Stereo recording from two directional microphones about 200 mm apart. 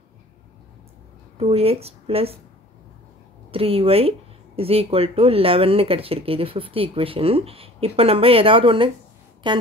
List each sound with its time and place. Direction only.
1.4 s speech: 30° right (ahead or behind)
3.5 s speech: 30° right (ahead or behind)